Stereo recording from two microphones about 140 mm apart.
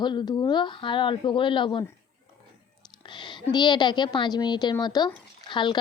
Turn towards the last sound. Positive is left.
turn(degrees=35)  # may be behind; listen again after turning